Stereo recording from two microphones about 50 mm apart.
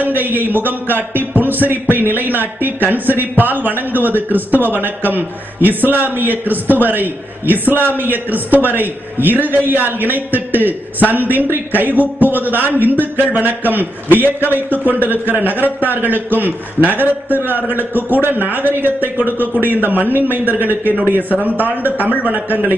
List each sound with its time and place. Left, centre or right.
0.0 s a man's voice: right